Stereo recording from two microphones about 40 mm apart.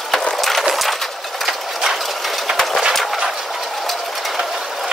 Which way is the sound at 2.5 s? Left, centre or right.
Centre.